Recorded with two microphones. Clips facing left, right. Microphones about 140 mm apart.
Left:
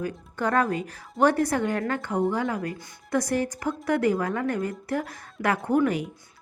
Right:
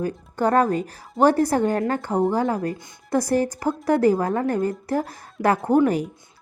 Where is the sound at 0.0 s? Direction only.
35° right (ahead or behind).